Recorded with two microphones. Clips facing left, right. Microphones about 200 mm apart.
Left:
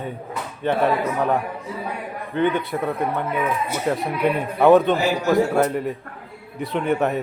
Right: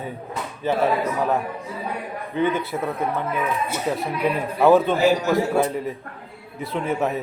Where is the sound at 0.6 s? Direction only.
5° right (ahead or behind).